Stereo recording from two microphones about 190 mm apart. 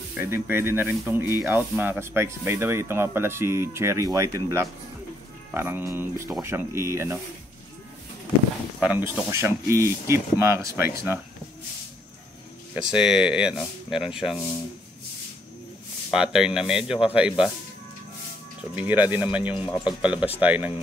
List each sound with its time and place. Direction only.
0.2 s speech: 10° right (ahead or behind)
8.7 s speech: 10° right (ahead or behind)
12.9 s speech: 5° right (ahead or behind)
16.1 s speech: 5° right (ahead or behind)
18.8 s speech: 10° right (ahead or behind)